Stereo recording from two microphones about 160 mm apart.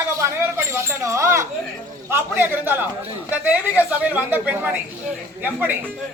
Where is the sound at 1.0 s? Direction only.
20° right (ahead or behind).